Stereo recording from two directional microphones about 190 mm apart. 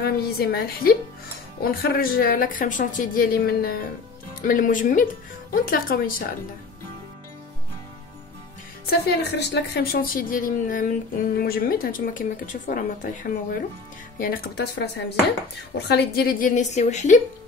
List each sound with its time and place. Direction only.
0.0 s a woman's voice: 55° left (ahead or behind)
9.0 s speech: 60° left (ahead or behind); by 17.2 s 40° left (ahead or behind)